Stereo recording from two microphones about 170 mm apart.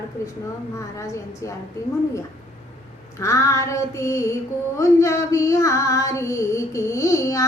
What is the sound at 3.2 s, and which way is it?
Female singing, 15° left (ahead or behind).